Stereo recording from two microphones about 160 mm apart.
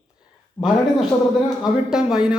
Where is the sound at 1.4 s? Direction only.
5° right (ahead or behind).